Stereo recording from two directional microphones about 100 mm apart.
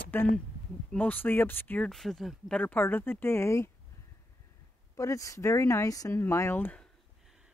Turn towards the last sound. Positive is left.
turn(degrees=20)  # may be behind; listen again after turning